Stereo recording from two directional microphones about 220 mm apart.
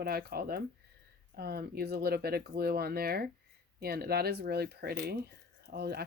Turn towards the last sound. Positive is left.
turn(degrees=-45)  # may be behind; listen again after turning